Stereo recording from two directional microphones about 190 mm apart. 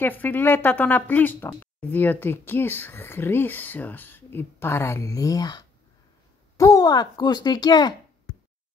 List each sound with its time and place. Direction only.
0.0 s speech: 10° left (ahead or behind)